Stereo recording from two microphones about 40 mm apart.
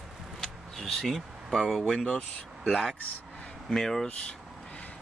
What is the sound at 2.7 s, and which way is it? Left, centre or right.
Speech, centre.